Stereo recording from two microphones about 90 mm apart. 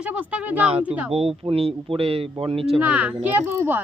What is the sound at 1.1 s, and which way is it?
Speech, 90° right.